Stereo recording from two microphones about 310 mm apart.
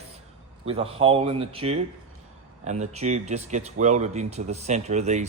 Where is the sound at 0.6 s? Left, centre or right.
Centre.